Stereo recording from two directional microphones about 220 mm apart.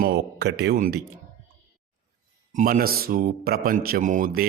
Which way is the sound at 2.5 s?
40° right (ahead or behind).